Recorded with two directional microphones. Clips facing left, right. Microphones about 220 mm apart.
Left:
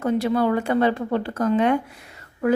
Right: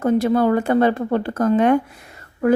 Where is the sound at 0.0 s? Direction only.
45° right (ahead or behind).